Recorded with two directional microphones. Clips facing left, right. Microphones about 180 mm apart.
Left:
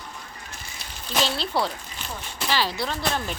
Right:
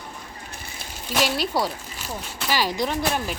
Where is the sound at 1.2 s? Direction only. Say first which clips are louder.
Right 2 dB; 10° right (ahead or behind).